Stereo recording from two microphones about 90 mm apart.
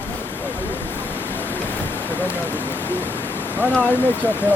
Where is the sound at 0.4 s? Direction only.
20° left (ahead or behind).